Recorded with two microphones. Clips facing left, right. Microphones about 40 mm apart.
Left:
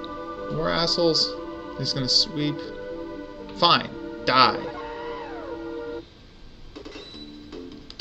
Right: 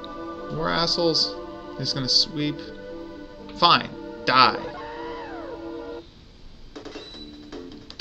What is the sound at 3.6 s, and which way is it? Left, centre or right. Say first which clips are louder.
Speech: right 1 dB; centre.